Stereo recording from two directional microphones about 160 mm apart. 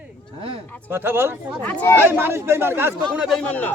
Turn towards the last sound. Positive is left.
turn(degrees=10)  # may be behind; listen again after turning